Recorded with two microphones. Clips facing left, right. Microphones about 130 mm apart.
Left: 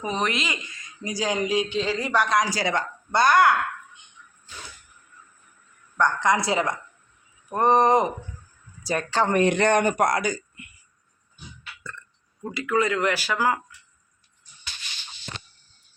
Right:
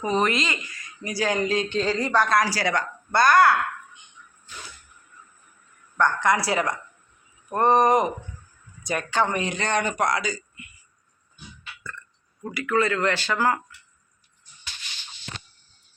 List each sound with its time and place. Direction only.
0.0 s speech: centre (ahead or behind)
0.5 s speech: 20° left (ahead or behind)
6.0 s speech: 20° left (ahead or behind); by 9.3 s 35° left (ahead or behind)
9.3 s speech: 55° left (ahead or behind)
11.8 s burping: 20° left (ahead or behind)
12.5 s speech: 20° left (ahead or behind)